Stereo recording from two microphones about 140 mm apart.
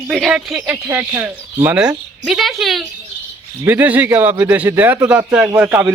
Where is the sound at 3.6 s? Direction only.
15° right (ahead or behind).